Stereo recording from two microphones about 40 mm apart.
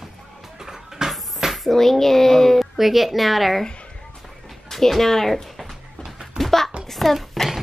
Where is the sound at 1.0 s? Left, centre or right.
Centre.